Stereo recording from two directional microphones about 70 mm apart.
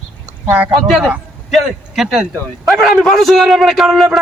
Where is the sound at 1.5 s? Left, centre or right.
Centre.